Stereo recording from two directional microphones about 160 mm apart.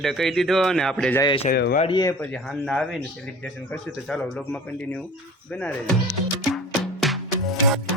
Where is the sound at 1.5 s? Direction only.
80° left.